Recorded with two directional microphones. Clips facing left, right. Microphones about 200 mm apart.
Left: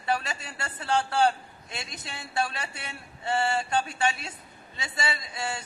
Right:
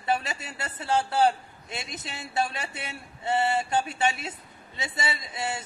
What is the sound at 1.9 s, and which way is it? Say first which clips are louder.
A man's voice: right 1 dB; 20° right (ahead or behind).